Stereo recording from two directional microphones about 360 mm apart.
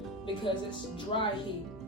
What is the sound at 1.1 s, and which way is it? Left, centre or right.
Speech, centre.